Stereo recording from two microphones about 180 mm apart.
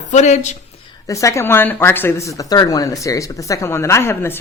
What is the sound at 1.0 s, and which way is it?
Speech, 15° left (ahead or behind).